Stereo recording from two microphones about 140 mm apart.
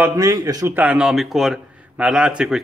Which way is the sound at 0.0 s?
20° right (ahead or behind).